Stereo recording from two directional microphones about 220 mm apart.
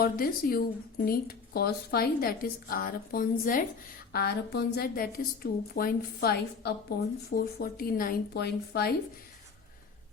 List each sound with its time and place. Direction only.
0.0 s a woman's voice: 40° left (ahead or behind)